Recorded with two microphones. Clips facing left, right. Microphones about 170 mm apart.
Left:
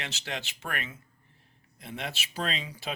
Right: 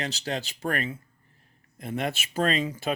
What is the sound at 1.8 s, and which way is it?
Speech, 50° right (ahead or behind).